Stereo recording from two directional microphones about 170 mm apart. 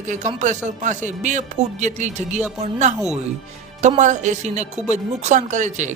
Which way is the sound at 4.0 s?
45° right (ahead or behind).